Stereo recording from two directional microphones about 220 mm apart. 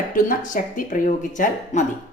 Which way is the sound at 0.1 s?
35° left (ahead or behind).